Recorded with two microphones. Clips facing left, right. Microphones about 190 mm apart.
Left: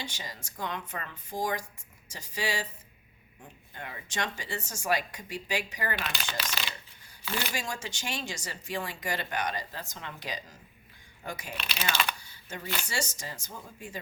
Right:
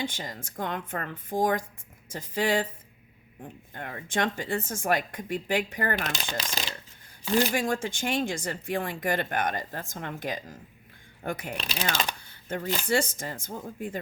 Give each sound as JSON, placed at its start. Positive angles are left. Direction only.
{"t": 0.0, "sound": "speech", "side_deg": -50}
{"t": 6.5, "sound": "coin", "side_deg": -40}
{"t": 7.3, "sound": "speech", "side_deg": -40}
{"t": 7.5, "sound": "speech", "side_deg": -55}
{"t": 11.5, "sound": "speech", "side_deg": -35}
{"t": 12.2, "sound": "speech", "side_deg": -55}